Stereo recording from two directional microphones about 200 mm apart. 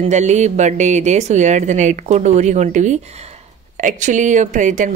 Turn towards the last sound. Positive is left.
turn(degrees=-40)  # may be behind; listen again after turning